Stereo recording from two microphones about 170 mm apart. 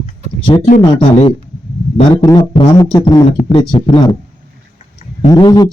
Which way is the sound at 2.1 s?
20° left (ahead or behind).